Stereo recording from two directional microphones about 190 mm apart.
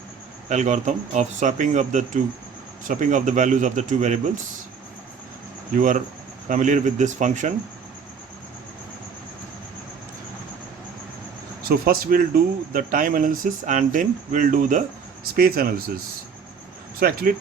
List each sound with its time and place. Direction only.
0.4 s speech: 40° right (ahead or behind)
5.7 s speech: 45° right (ahead or behind)
11.6 s speech: 50° right (ahead or behind)
17.0 s speech: 50° right (ahead or behind)